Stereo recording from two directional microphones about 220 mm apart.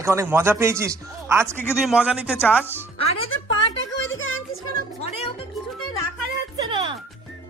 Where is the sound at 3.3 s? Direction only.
65° left (ahead or behind).